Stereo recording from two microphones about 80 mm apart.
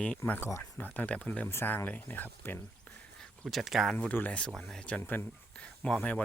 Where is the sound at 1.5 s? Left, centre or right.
Left.